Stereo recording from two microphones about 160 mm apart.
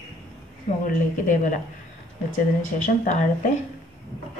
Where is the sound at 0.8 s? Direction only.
55° left (ahead or behind).